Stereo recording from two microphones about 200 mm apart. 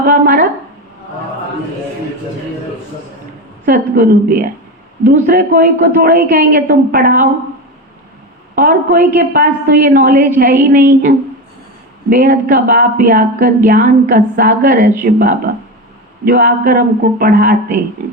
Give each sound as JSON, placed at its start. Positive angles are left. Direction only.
{"t": 0.0, "sound": "a woman's voice", "side_deg": -45}
{"t": 3.7, "sound": "a woman's voice", "side_deg": -45}
{"t": 8.5, "sound": "a woman's voice", "side_deg": -45}